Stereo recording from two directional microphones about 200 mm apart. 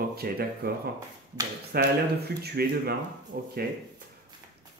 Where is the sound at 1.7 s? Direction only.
55° right (ahead or behind).